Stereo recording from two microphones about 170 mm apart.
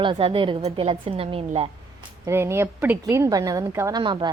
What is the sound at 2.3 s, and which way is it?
A woman's voice, 15° right (ahead or behind).